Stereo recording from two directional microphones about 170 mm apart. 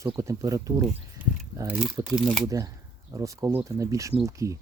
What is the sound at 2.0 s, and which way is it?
Speech, 20° right (ahead or behind).